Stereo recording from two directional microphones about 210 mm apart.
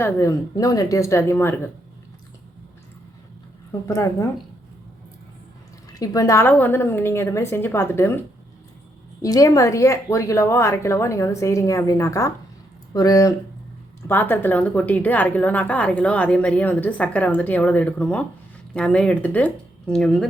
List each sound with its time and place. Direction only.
0.0 s a woman's voice: 15° left (ahead or behind)
3.7 s a woman's voice: 15° left (ahead or behind)
5.9 s a woman's voice: 15° left (ahead or behind)
9.2 s a woman's voice: 15° left (ahead or behind)